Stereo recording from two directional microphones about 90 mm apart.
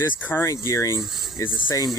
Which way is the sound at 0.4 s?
35° left (ahead or behind).